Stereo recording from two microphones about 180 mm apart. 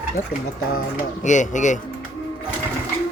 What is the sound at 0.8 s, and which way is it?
Speech, 45° left (ahead or behind).